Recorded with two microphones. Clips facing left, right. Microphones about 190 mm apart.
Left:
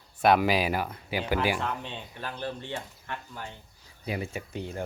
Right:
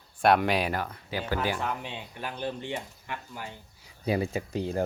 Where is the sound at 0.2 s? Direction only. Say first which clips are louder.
Left 1 dB; centre (ahead or behind).